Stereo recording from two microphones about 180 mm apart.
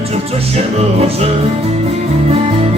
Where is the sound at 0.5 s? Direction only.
35° right (ahead or behind).